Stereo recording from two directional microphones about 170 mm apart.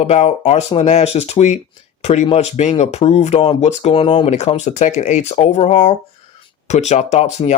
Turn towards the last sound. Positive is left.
turn(degrees=40)  # may be behind; listen again after turning